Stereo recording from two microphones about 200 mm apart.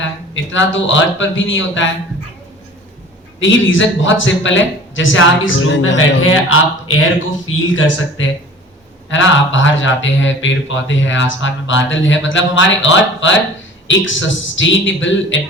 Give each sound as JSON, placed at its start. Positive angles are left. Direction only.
{"t": 0.5, "sound": "speech", "side_deg": 70}
{"t": 3.4, "sound": "speech", "side_deg": 70}
{"t": 8.2, "sound": "speech", "side_deg": 75}